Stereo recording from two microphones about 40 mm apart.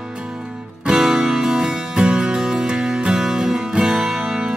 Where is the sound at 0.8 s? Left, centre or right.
Centre.